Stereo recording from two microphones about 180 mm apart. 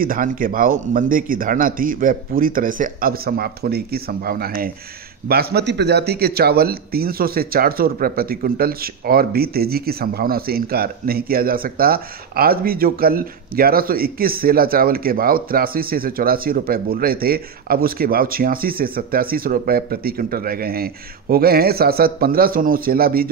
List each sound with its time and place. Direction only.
0.0 s a man's voice: 50° right (ahead or behind)